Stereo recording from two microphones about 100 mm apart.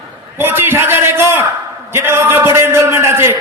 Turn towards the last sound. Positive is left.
turn(degrees=-25)  # may be behind; listen again after turning